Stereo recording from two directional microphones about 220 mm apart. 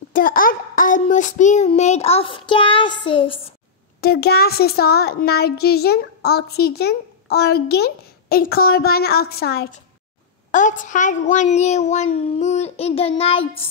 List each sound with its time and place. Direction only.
0.1 s child singing: 40° left (ahead or behind); by 3.3 s 25° left (ahead or behind)
4.0 s a child's voice: 45° left (ahead or behind)
10.5 s a child's voice: 35° left (ahead or behind)